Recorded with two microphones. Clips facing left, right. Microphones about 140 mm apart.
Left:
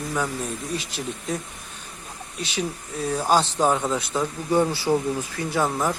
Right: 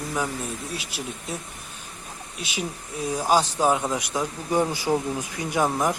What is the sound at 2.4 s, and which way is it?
Speech, 10° right (ahead or behind).